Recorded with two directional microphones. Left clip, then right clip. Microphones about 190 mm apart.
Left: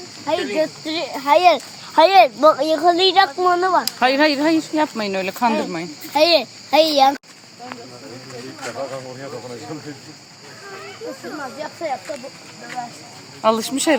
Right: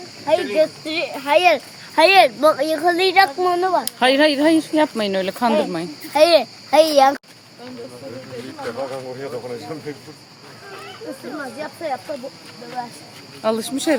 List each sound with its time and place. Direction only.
0.3 s speech: 5° left (ahead or behind)
3.8 s speech: 25° right (ahead or behind)
13.4 s speech: centre (ahead or behind)